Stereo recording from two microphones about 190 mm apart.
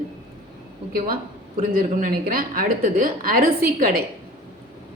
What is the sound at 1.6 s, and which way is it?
A woman's voice, 50° right (ahead or behind).